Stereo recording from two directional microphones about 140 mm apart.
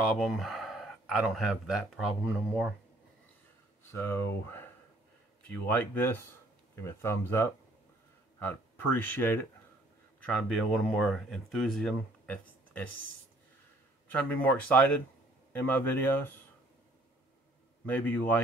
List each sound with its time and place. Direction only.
0.2 s speech: centre (ahead or behind)
3.9 s speech: 15° left (ahead or behind)
10.2 s speech: 5° left (ahead or behind)
14.0 s speech: 10° left (ahead or behind)
17.8 s speech: 15° left (ahead or behind)